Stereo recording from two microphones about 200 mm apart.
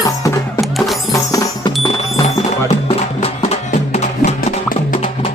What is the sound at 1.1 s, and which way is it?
Music, 15° left (ahead or behind).